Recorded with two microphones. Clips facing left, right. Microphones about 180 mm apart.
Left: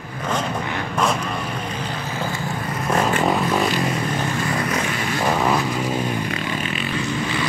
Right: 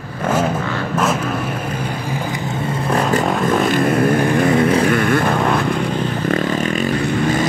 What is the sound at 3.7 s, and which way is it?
Vehicle, 55° right (ahead or behind).